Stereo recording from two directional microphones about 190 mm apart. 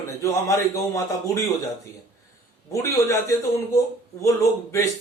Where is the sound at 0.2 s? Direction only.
15° left (ahead or behind).